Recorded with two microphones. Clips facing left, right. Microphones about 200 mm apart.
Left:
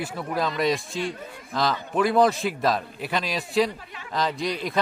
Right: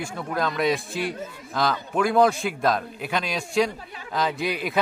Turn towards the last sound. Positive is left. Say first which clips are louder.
# right 1 dB
turn(degrees=-5)  # may be behind; listen again after turning